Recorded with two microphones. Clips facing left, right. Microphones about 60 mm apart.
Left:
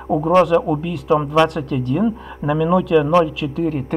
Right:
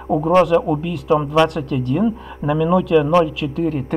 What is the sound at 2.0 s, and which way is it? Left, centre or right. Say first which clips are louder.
Speech: even; left.